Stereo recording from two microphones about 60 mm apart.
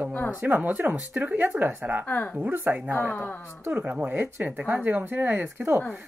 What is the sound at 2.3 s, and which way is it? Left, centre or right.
Speech, right.